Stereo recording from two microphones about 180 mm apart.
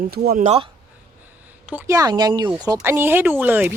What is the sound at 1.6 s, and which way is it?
Speech, 15° right (ahead or behind).